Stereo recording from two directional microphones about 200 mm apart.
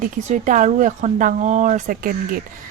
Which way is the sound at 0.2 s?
35° right (ahead or behind).